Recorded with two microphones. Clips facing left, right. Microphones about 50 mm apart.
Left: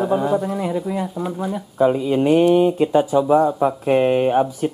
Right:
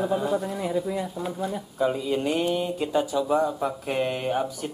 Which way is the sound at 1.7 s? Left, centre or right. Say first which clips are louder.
Left 9 dB; left.